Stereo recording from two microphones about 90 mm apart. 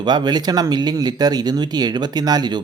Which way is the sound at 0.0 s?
50° right (ahead or behind).